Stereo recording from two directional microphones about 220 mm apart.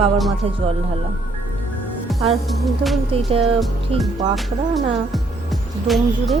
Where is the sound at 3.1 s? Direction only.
25° right (ahead or behind).